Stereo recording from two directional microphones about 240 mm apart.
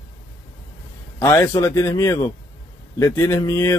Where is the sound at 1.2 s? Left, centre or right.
Centre.